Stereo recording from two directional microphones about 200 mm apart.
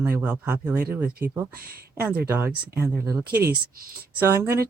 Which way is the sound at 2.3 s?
10° right (ahead or behind).